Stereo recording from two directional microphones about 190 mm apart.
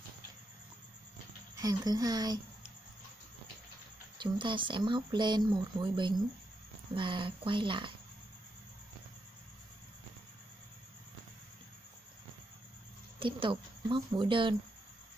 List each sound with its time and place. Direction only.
1.6 s speech: 20° right (ahead or behind)
4.2 s speech: 25° right (ahead or behind)
13.2 s speech: 25° right (ahead or behind)